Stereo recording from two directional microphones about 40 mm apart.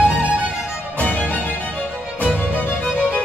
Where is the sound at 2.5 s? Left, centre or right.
Left.